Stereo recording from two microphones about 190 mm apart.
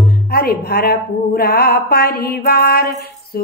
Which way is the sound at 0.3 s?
55° left (ahead or behind).